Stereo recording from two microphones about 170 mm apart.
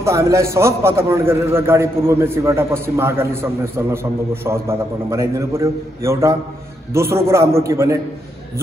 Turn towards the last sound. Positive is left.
turn(degrees=-20)  # may be behind; listen again after turning